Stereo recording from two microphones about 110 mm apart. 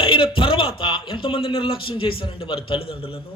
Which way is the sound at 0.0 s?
55° left (ahead or behind).